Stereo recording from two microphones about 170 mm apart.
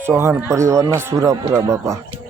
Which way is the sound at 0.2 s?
15° right (ahead or behind).